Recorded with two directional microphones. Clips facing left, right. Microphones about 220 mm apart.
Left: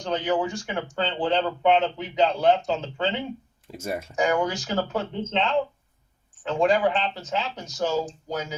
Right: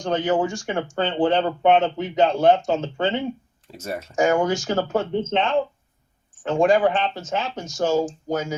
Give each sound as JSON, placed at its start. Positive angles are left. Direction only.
{"t": 0.0, "sound": "speech", "side_deg": -50}
{"t": 3.7, "sound": "speech", "side_deg": 10}
{"t": 4.1, "sound": "speech", "side_deg": -45}